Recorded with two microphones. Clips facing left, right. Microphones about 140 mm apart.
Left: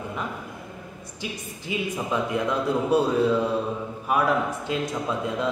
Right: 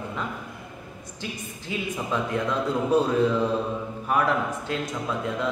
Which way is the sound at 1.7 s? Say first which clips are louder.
Left 2 dB; 15° left (ahead or behind).